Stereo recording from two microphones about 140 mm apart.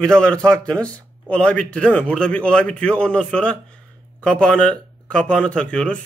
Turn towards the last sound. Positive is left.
turn(degrees=5)  # may be behind; listen again after turning